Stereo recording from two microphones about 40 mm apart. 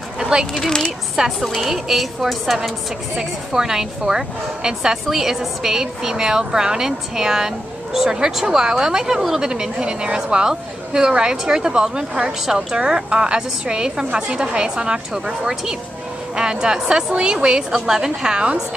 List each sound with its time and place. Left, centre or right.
0.2 s a sound: centre
0.6 s a woman's voice: centre
3.2 s a woman's voice: centre
17.8 s a woman's voice: centre